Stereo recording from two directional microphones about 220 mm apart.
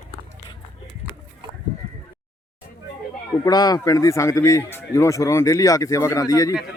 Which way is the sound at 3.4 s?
15° left (ahead or behind).